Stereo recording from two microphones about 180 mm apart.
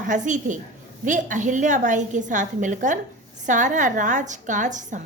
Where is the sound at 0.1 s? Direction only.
45° right (ahead or behind).